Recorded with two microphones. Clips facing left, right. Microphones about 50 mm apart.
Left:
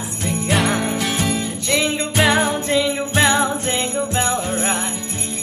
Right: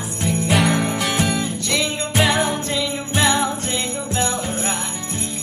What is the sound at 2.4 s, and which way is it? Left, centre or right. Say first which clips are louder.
Jingle bell: left 4 dB; centre.